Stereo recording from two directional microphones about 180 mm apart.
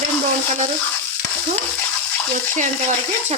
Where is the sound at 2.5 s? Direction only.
40° right (ahead or behind).